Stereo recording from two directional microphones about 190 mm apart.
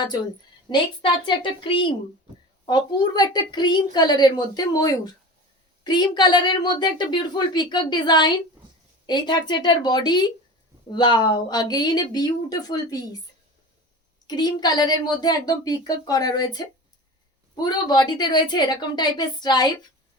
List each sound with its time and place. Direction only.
0.7 s a woman's voice: 25° left (ahead or behind)
14.3 s a woman's voice: 20° left (ahead or behind)